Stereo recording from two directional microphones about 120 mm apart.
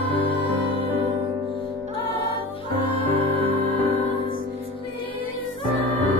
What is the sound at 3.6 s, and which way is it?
Music, 15° left (ahead or behind).